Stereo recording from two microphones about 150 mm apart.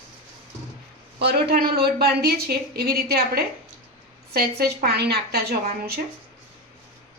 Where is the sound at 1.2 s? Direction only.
90° right.